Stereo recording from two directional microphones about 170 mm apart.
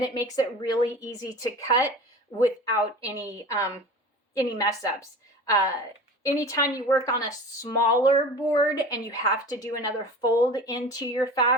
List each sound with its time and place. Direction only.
0.0 s a woman's voice: 20° left (ahead or behind)